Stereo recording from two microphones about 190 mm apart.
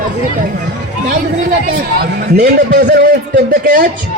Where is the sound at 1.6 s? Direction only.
55° right (ahead or behind).